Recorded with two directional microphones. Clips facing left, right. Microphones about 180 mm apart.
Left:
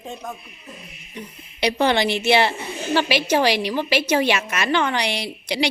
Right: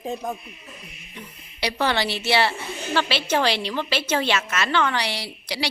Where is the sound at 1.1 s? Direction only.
20° left (ahead or behind).